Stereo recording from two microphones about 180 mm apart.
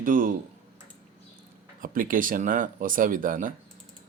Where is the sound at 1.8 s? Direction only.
50° right (ahead or behind).